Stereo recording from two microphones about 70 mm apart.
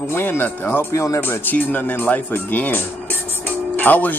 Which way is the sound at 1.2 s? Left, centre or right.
Left.